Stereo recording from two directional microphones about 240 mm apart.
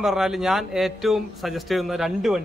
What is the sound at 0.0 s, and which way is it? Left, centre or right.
A man's voice, centre.